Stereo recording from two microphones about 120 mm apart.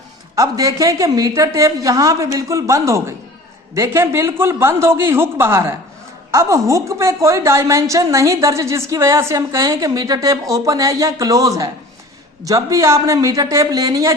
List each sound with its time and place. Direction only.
0.3 s a woman's voice: 30° right (ahead or behind)